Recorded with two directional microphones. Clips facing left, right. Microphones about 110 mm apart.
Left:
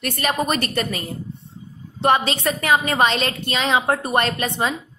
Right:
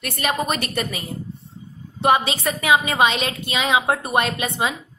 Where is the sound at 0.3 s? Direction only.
Centre (ahead or behind).